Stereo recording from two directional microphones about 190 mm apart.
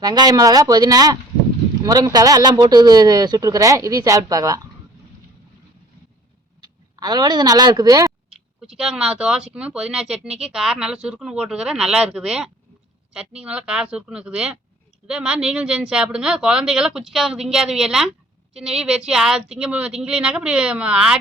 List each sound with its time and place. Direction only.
0.0 s speech: 20° right (ahead or behind)
6.6 s speech: 20° right (ahead or behind)
8.3 s speech: 5° right (ahead or behind)